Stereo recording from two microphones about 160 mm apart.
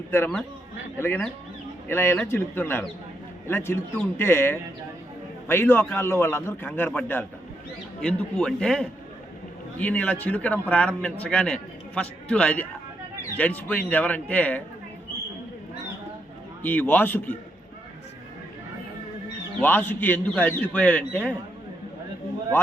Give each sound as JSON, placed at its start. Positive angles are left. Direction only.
{"t": 0.1, "sound": "a man's voice", "side_deg": 10}
{"t": 16.6, "sound": "a man's voice", "side_deg": 10}
{"t": 19.6, "sound": "a man's voice", "side_deg": 10}